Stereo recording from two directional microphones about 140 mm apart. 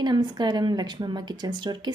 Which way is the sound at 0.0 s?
30° right (ahead or behind).